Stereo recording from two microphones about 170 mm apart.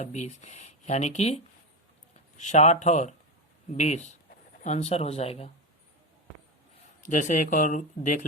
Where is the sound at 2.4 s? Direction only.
45° left (ahead or behind).